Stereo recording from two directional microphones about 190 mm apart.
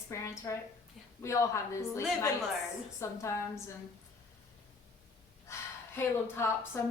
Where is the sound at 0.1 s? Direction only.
15° left (ahead or behind).